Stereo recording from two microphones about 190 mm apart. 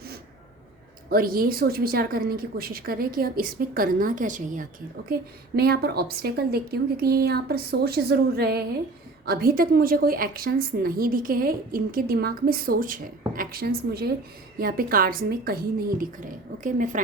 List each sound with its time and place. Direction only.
1.1 s a woman's voice: 50° right (ahead or behind)
5.5 s a woman's voice: 55° right (ahead or behind)